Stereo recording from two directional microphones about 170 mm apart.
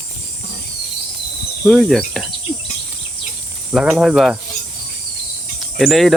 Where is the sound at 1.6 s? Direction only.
Centre (ahead or behind).